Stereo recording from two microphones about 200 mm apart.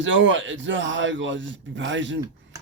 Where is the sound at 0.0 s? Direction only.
70° right (ahead or behind).